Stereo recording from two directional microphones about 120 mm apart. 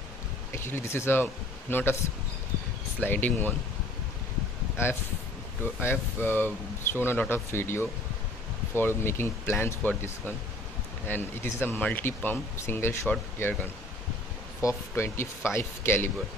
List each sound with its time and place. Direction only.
0.5 s speech: 20° left (ahead or behind)
3.0 s speech: 15° left (ahead or behind)
5.6 s speech: 20° left (ahead or behind)
14.6 s speech: 25° left (ahead or behind)